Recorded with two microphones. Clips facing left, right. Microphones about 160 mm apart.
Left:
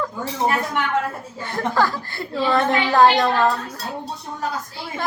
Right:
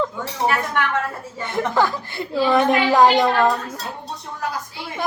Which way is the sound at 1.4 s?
20° right (ahead or behind).